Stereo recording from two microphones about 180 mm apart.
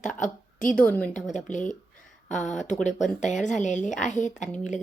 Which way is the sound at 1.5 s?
45° left (ahead or behind).